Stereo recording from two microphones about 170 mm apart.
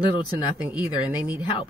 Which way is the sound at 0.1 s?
25° left (ahead or behind).